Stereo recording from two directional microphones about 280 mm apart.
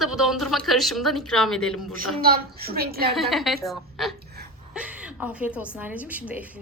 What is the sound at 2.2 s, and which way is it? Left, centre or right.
Speech, right.